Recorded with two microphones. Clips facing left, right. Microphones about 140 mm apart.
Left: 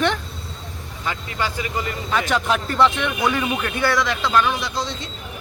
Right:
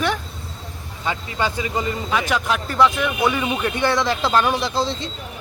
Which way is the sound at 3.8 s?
25° right (ahead or behind).